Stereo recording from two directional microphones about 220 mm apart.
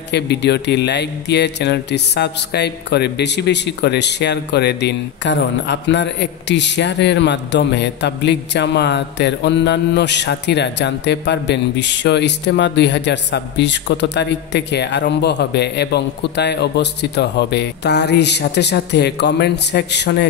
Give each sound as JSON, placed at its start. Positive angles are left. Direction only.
{"t": 0.1, "sound": "speech", "side_deg": 50}